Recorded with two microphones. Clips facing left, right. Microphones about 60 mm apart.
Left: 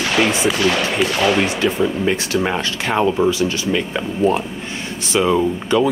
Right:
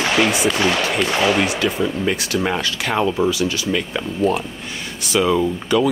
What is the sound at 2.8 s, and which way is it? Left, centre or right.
Speech, left.